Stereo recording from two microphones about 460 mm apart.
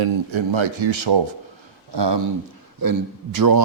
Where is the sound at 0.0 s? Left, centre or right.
Right.